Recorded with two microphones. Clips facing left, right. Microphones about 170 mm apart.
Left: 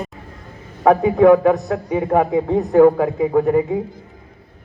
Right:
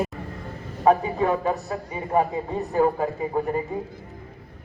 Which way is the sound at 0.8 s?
80° left.